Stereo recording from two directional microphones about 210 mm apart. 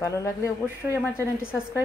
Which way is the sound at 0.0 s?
15° left (ahead or behind).